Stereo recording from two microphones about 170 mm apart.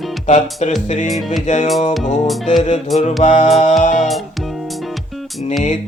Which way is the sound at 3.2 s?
45° left (ahead or behind).